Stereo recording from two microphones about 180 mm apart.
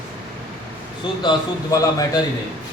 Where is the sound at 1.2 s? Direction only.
20° left (ahead or behind).